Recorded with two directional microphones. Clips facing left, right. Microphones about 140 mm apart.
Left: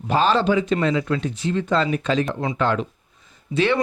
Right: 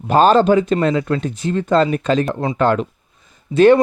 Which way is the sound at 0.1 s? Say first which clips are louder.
Right 7 dB; 45° right (ahead or behind).